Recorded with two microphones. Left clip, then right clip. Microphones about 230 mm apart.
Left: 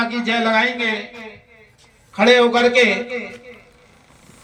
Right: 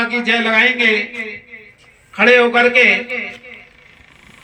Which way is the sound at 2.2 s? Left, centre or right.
Left.